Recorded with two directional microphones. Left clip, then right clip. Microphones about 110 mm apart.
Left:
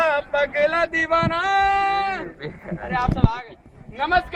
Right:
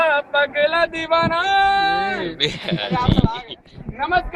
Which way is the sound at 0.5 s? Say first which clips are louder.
Right 1 dB; 40° left (ahead or behind).